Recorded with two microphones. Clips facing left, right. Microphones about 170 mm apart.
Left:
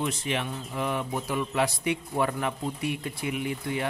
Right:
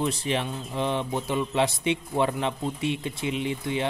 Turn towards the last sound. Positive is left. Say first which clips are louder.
# right 2 dB
turn(degrees=-25)  # may be behind; listen again after turning